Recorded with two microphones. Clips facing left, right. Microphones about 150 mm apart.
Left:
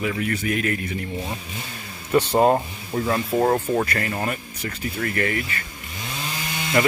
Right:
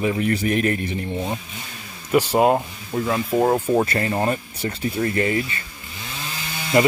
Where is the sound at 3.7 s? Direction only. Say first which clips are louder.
Right 3 dB; 20° right (ahead or behind).